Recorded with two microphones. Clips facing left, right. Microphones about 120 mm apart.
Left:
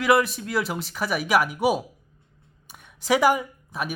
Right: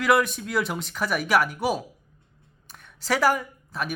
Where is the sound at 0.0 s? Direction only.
5° left (ahead or behind).